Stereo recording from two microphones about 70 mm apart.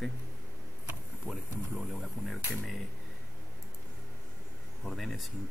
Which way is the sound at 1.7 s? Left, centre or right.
Centre.